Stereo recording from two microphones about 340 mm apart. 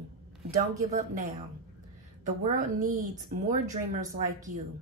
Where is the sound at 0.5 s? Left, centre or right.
Right.